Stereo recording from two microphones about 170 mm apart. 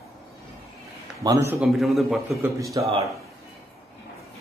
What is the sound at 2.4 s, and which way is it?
Speech, 20° right (ahead or behind).